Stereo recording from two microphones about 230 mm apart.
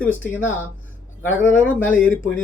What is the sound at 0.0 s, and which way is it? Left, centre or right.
Speech, centre.